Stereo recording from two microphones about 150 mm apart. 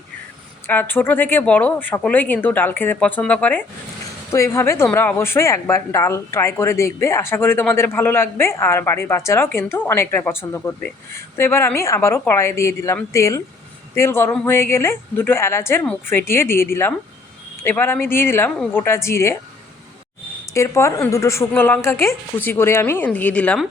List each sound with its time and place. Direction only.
0.7 s a woman's voice: 10° left (ahead or behind)
20.5 s a woman's voice: 20° left (ahead or behind)